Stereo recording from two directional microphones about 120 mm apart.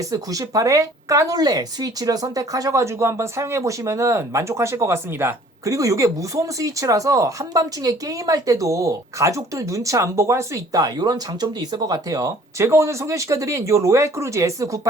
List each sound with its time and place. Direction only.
0.0 s speech: 30° right (ahead or behind)